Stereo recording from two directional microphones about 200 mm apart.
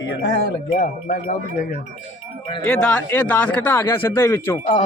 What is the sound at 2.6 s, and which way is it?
A man's voice, 5° left (ahead or behind).